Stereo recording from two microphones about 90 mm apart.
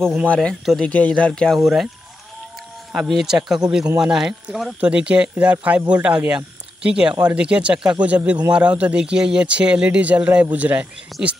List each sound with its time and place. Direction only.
0.3 s speech: 10° left (ahead or behind)
1.6 s speech: 5° right (ahead or behind)
2.9 s a man's voice: 5° right (ahead or behind)
11.1 s speech: centre (ahead or behind)